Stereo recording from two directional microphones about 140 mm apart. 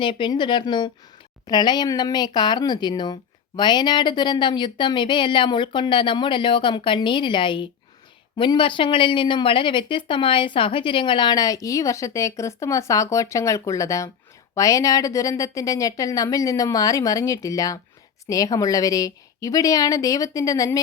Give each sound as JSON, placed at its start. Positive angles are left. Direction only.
{"t": 0.0, "sound": "a woman's voice", "side_deg": 35}